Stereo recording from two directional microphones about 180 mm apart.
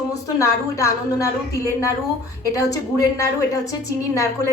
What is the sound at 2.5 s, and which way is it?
A woman's voice, 20° left (ahead or behind).